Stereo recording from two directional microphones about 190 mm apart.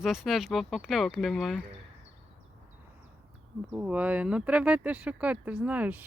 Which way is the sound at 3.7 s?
5° right (ahead or behind).